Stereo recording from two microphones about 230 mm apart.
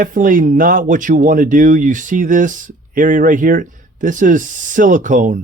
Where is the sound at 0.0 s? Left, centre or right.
Right.